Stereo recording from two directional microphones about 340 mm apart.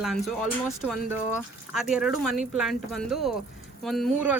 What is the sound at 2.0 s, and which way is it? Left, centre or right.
Speech, centre.